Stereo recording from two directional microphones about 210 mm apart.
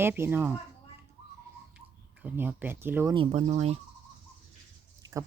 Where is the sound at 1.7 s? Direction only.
10° right (ahead or behind).